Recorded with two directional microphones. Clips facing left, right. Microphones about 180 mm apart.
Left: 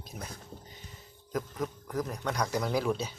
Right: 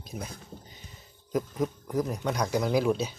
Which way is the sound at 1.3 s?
20° right (ahead or behind).